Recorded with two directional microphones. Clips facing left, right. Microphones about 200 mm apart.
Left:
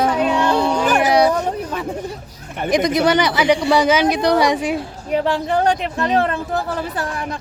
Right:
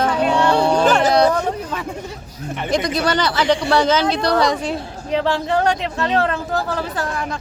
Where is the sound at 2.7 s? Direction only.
20° left (ahead or behind).